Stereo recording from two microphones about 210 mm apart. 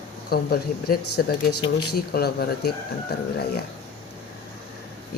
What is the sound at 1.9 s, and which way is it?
Speech, 50° left (ahead or behind).